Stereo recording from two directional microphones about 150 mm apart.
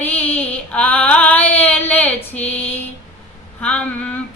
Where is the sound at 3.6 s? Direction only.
10° left (ahead or behind).